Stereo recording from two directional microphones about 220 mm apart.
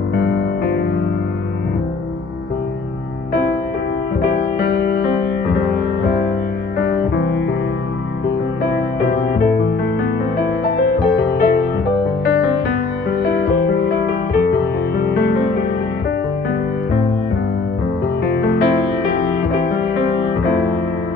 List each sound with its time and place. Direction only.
4.6 s music: 45° left (ahead or behind)
6.8 s music: 45° left (ahead or behind)
11.1 s music: 45° left (ahead or behind)
15.0 s music: 50° left (ahead or behind)